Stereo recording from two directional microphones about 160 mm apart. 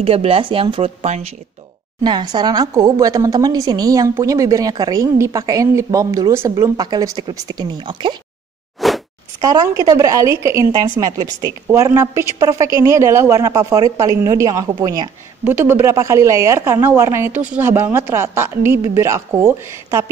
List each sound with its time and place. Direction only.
0.0 s speech: 35° right (ahead or behind)
2.0 s a woman's voice: 25° right (ahead or behind)
8.8 s a sound: centre (ahead or behind)
9.4 s a woman's voice: 20° right (ahead or behind)